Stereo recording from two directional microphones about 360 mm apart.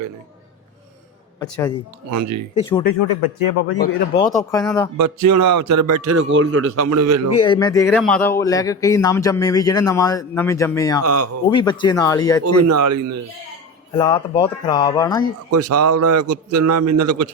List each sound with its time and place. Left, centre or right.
1.4 s speech: centre
2.0 s a man's voice: right
3.0 s speech: left
3.5 s a man's voice: left
4.2 s speech: centre
4.9 s a man's voice: right
7.3 s speech: centre
11.0 s a man's voice: right
11.4 s speech: centre
12.5 s a man's voice: right
14.0 s speech: centre
15.5 s a man's voice: right